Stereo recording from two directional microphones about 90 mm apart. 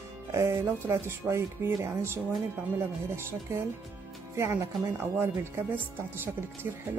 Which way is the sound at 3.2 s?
30° right (ahead or behind).